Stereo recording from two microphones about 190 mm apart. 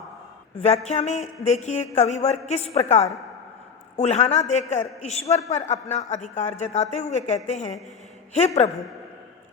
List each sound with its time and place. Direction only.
0.9 s speech: 35° left (ahead or behind)